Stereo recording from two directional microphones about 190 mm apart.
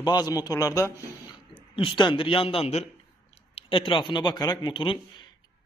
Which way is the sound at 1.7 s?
30° left (ahead or behind).